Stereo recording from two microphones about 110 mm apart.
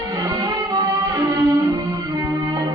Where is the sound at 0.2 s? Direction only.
40° right (ahead or behind).